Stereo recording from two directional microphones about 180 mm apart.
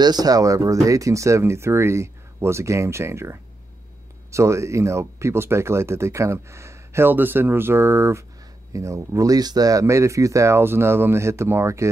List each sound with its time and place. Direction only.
0.0 s speech: 20° right (ahead or behind)